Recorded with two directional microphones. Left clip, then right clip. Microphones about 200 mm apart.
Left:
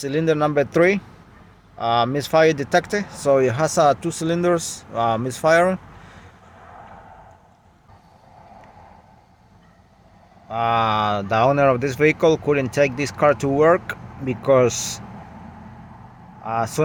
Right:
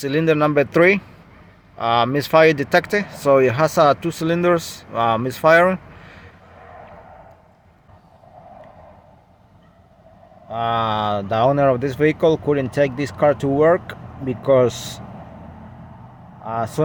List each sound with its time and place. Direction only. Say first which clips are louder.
0.0 s speech: right 2 dB; 5° right (ahead or behind)
10.5 s speech: left 1 dB; 5° right (ahead or behind)
16.4 s speech: left 1 dB; 5° right (ahead or behind)